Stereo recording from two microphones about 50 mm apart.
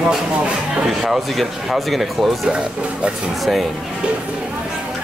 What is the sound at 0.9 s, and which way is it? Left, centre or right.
Speech, centre.